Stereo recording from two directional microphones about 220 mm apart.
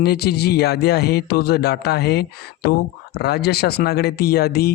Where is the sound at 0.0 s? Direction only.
45° left (ahead or behind).